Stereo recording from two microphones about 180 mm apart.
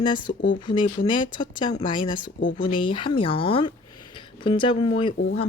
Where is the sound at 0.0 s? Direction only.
25° left (ahead or behind).